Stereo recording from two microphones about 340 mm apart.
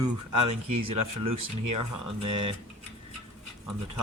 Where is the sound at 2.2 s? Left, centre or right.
Centre.